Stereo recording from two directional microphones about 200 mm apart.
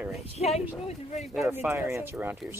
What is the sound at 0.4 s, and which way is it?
Speech, 30° left (ahead or behind).